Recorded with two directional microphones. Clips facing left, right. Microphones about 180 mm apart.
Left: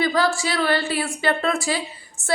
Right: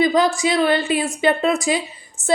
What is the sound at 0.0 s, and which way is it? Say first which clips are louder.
A woman's voice: right 4 dB; 20° right (ahead or behind).